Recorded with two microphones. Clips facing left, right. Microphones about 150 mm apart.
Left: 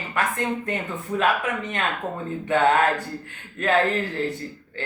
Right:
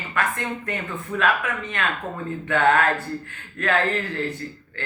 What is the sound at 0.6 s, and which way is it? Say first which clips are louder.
Speech: left 1 dB; 20° left (ahead or behind).